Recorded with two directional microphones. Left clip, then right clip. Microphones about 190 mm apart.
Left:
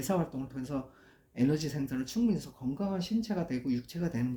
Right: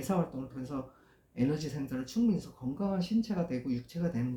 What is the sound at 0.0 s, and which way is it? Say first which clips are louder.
Speech: left 1 dB; 40° left (ahead or behind).